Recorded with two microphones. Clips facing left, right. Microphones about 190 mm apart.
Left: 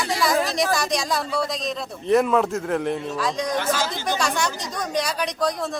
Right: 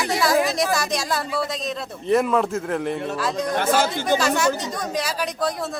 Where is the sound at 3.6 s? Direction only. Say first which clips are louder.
Right 4 dB; 55° right (ahead or behind).